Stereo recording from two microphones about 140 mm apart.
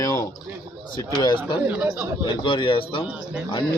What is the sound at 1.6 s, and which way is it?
Speech, 10° right (ahead or behind).